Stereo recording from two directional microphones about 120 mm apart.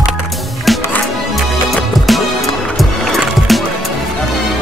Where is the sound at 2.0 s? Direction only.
Centre (ahead or behind).